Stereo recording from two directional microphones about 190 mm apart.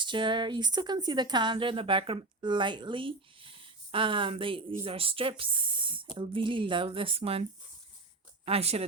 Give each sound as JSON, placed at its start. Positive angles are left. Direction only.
{"t": 0.0, "sound": "speech", "side_deg": -25}
{"t": 8.4, "sound": "speech", "side_deg": -30}